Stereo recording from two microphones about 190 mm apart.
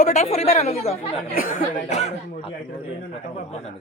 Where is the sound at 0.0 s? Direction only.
35° left (ahead or behind).